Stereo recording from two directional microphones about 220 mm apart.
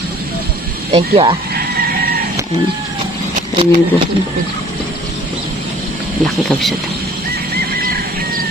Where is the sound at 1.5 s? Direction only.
45° right (ahead or behind).